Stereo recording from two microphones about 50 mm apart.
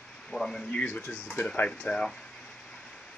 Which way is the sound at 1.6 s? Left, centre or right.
Centre.